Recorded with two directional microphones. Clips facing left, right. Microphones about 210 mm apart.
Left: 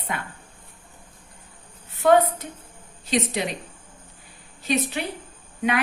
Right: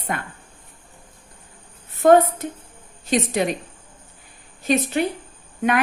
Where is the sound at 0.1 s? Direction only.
50° right (ahead or behind).